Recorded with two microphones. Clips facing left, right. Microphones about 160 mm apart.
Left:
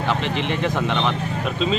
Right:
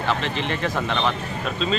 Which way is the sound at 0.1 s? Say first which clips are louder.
Left 1 dB; 15° left (ahead or behind).